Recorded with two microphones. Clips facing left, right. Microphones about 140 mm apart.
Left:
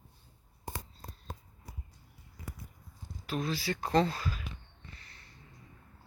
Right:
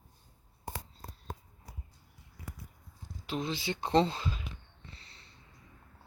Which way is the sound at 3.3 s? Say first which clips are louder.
Left 1 dB; 20° right (ahead or behind).